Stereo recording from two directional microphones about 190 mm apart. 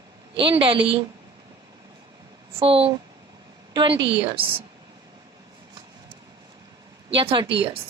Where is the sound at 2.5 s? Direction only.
30° right (ahead or behind).